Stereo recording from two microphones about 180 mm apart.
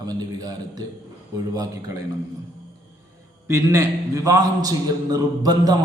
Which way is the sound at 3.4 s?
15° right (ahead or behind).